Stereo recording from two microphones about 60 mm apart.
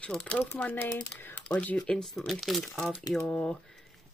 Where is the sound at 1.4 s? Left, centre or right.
Left.